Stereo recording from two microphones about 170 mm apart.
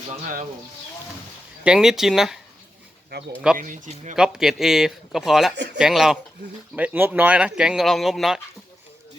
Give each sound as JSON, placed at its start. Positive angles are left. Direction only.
{"t": 1.6, "sound": "speech", "side_deg": -5}
{"t": 3.6, "sound": "speech", "side_deg": -50}
{"t": 4.1, "sound": "speech", "side_deg": -5}